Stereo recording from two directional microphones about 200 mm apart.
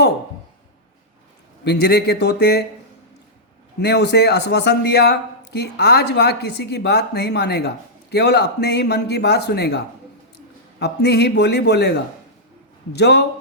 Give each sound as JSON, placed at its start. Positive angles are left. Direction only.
{"t": 1.6, "sound": "a man's voice", "side_deg": 55}
{"t": 3.8, "sound": "a man's voice", "side_deg": 55}